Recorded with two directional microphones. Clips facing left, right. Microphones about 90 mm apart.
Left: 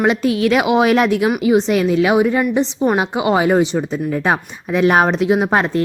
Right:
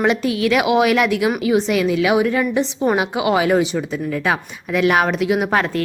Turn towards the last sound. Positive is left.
turn(degrees=25)  # may be behind; listen again after turning